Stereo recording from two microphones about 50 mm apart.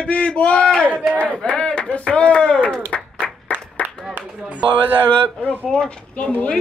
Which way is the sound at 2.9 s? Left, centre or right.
Left.